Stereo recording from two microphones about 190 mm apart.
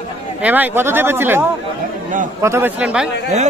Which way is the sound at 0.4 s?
10° right (ahead or behind).